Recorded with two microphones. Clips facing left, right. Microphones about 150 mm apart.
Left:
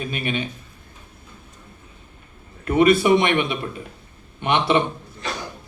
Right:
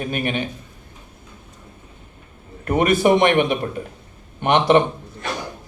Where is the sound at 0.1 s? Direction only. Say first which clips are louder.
Right 3 dB; 50° right (ahead or behind).